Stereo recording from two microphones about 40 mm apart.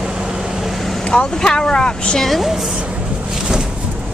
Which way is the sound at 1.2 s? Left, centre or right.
Centre.